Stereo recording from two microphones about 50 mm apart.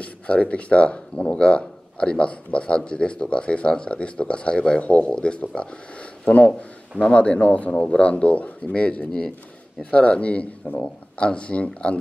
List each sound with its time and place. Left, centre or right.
0.0 s speech: left